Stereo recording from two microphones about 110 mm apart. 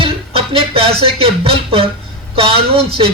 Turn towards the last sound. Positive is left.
turn(degrees=-60)  # may be behind; listen again after turning